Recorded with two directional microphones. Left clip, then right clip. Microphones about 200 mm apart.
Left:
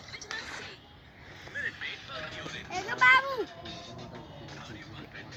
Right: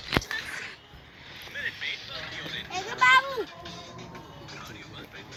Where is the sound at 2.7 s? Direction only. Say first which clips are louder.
Right 2 dB; centre (ahead or behind).